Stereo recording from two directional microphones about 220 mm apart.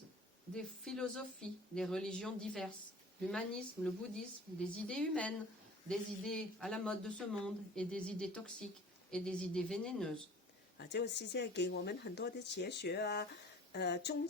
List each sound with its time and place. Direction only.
0.5 s speech: 5° left (ahead or behind)
10.8 s speech: 50° left (ahead or behind)